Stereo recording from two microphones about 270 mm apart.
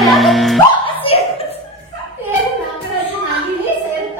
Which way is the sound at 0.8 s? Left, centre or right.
Left.